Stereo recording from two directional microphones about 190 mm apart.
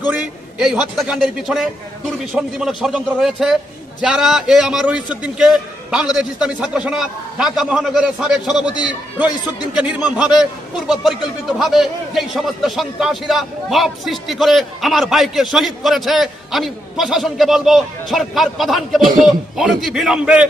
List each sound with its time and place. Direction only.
0.6 s a man's voice: centre (ahead or behind)
8.7 s a man's voice: 20° left (ahead or behind)
9.7 s a man's voice: 5° right (ahead or behind)